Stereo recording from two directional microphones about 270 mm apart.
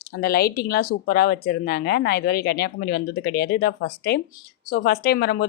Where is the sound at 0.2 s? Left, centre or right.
Left.